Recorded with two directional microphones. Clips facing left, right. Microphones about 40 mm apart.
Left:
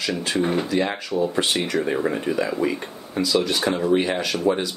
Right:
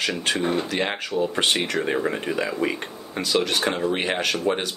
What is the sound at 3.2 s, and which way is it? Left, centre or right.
Speech, right.